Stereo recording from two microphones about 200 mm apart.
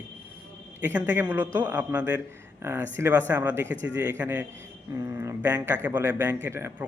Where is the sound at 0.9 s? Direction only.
10° right (ahead or behind).